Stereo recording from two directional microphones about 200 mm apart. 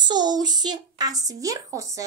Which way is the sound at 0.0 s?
20° right (ahead or behind).